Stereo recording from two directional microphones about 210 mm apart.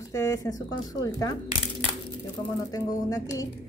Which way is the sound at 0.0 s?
15° left (ahead or behind).